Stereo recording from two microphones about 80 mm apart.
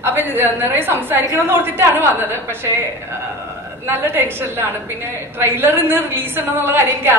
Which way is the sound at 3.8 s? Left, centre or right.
Right.